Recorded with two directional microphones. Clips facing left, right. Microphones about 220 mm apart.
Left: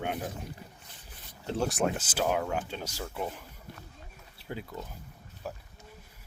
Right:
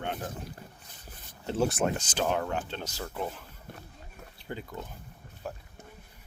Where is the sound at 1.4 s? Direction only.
Centre (ahead or behind).